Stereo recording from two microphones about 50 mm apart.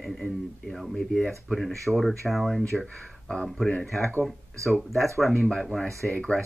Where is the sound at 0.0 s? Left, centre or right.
Centre.